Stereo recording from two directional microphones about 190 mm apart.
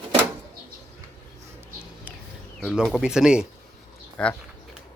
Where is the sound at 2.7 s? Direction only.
5° right (ahead or behind).